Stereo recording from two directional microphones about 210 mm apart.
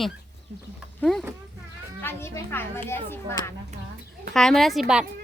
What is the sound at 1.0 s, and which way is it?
Speech, centre (ahead or behind).